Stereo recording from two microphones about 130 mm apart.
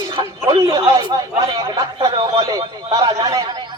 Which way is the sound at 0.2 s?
35° right (ahead or behind).